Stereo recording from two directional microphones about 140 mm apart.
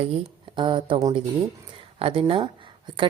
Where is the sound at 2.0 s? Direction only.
40° right (ahead or behind).